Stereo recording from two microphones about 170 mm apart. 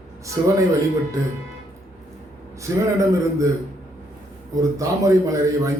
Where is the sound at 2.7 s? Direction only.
20° right (ahead or behind).